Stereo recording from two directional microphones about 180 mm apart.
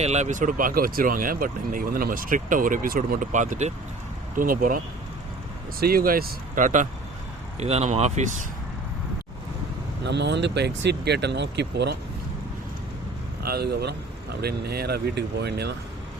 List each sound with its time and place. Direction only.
0.0 s speech: 40° right (ahead or behind)
5.8 s speech: 55° right (ahead or behind)
10.0 s speech: 70° right (ahead or behind)
13.4 s speech: 60° right (ahead or behind)